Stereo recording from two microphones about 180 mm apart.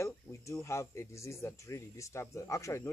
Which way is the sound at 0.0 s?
15° left (ahead or behind).